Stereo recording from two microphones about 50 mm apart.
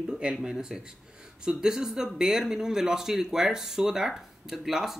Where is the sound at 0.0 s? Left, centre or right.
Centre.